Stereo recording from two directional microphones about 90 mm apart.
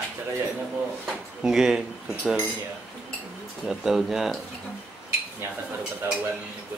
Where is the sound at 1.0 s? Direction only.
5° right (ahead or behind).